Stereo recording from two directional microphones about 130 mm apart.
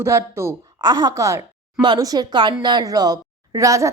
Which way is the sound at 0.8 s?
30° right (ahead or behind).